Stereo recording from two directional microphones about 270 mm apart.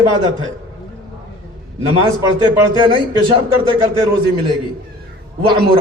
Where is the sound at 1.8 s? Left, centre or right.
Centre.